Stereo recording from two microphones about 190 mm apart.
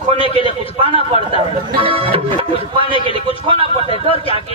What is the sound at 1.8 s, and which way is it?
Speech, 30° right (ahead or behind).